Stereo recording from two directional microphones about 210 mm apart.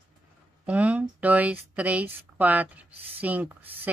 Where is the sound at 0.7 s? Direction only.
5° right (ahead or behind).